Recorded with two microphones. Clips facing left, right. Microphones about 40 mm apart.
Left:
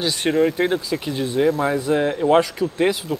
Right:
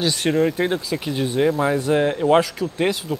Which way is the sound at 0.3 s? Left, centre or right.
Centre.